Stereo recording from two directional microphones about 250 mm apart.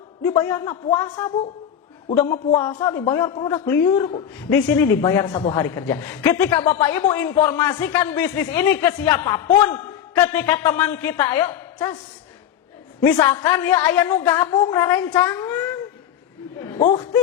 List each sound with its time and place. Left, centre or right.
0.3 s a woman's voice: centre
2.6 s a woman's voice: centre
9.2 s a man's voice: centre
13.0 s a woman's voice: centre
16.7 s speech: left